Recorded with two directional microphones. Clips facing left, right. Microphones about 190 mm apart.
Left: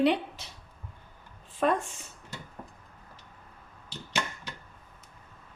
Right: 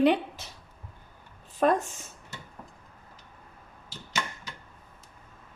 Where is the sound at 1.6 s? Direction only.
40° right (ahead or behind).